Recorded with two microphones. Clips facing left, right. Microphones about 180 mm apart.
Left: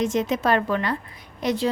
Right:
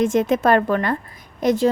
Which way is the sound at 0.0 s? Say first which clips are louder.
Right 5 dB; 50° right (ahead or behind).